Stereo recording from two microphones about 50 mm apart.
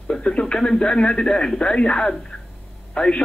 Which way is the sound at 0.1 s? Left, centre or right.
Centre.